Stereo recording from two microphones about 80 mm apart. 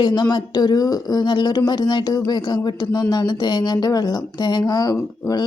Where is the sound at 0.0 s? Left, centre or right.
Left.